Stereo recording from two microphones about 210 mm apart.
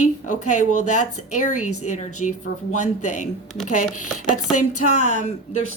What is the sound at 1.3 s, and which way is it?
Speech, 35° left (ahead or behind).